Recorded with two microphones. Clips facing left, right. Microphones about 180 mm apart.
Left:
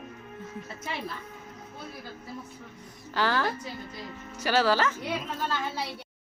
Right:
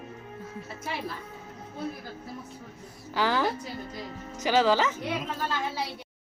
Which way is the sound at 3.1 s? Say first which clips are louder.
Right 1 dB; 15° right (ahead or behind).